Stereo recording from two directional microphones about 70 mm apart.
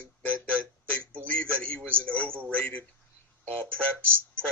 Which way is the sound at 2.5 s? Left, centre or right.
Centre.